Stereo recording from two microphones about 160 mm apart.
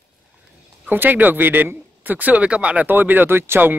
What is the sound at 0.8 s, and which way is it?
A man's voice, 10° right (ahead or behind).